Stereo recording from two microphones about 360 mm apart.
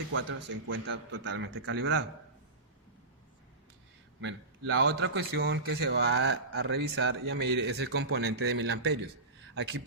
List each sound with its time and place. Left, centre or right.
0.1 s a man's voice: right
4.2 s a man's voice: right